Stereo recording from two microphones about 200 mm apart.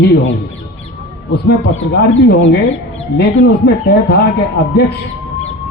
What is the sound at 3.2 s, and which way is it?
Speech, 55° left (ahead or behind).